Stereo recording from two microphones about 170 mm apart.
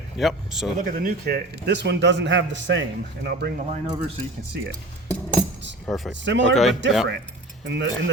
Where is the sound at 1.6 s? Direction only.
90° right.